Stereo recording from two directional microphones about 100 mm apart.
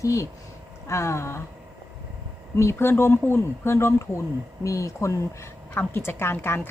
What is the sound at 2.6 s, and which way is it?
A woman's voice, 25° left (ahead or behind).